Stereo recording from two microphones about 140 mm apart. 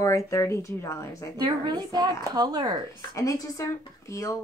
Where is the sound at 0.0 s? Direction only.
20° left (ahead or behind).